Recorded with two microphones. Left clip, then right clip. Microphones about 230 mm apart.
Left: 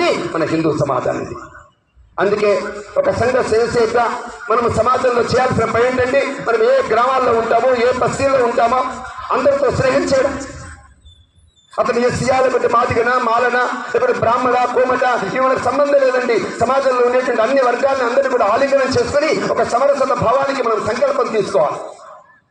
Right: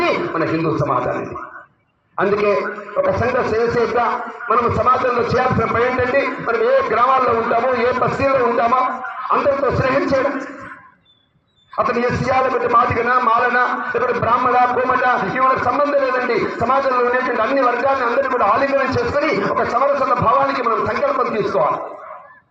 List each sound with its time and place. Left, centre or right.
0.0 s a man's voice: left
11.8 s a man's voice: left